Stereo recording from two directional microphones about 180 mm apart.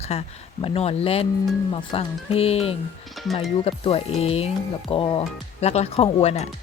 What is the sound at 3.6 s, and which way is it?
Speech, 30° left (ahead or behind).